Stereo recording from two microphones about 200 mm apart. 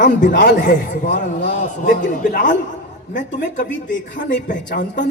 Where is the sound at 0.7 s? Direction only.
40° left (ahead or behind).